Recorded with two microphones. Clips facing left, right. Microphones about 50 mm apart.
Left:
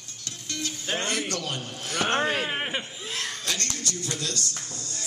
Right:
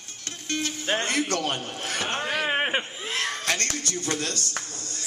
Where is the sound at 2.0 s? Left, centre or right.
Left.